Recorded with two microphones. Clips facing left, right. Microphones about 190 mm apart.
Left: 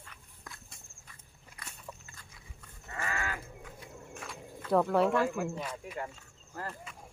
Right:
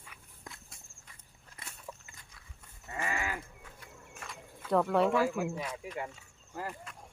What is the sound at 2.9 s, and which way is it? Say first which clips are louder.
Livestock: right 1 dB; 15° right (ahead or behind).